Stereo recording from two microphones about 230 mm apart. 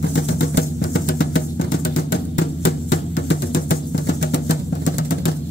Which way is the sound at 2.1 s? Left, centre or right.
Left.